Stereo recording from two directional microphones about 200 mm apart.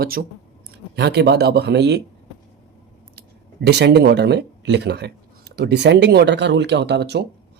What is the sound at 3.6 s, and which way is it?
Speech, 60° right (ahead or behind).